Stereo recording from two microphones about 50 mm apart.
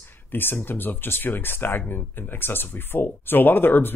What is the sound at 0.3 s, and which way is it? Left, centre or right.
Speech, left.